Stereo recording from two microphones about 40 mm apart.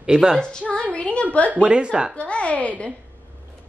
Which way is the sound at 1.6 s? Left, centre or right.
Right.